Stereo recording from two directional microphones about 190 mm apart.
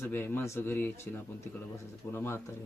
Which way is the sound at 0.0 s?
10° left (ahead or behind).